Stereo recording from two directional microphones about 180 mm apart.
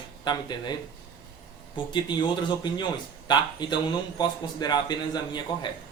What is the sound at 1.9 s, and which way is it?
Speech, 25° left (ahead or behind).